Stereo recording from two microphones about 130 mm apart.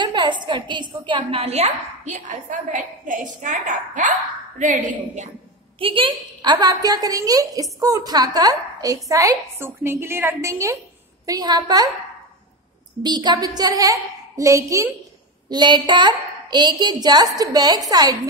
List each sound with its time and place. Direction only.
0.0 s a woman's voice: 35° right (ahead or behind); by 4.1 s 85° right
4.8 s a woman's voice: 65° right (ahead or behind)
5.8 s a woman's voice: 45° right (ahead or behind)
13.0 s a woman's voice: 35° right (ahead or behind)
15.5 s a child's voice: 35° right (ahead or behind)